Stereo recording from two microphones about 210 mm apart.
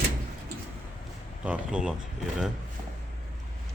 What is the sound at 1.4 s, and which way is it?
Speech, 5° right (ahead or behind).